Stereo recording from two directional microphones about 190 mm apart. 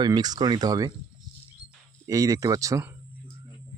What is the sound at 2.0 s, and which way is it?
Speech, 15° right (ahead or behind).